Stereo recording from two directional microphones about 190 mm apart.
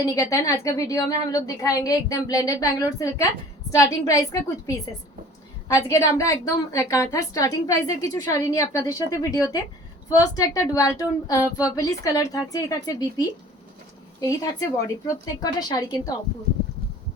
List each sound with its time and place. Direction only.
0.0 s a woman's voice: 15° left (ahead or behind)